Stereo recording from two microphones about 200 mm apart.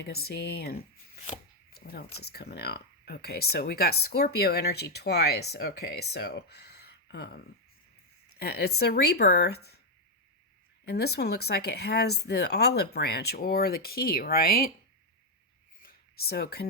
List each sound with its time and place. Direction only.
0.0 s chopping: 50° left (ahead or behind)
2.2 s speech: 55° left (ahead or behind)
10.8 s speech: 55° left (ahead or behind)
15.8 s a sound: 50° left (ahead or behind)